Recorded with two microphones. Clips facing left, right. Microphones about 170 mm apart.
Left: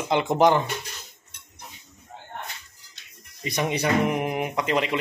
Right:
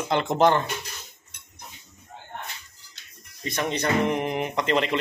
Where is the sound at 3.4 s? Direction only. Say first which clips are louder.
Left 1 dB; 15° left (ahead or behind).